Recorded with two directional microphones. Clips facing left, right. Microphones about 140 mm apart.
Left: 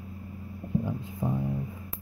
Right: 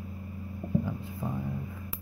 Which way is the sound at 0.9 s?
20° left (ahead or behind).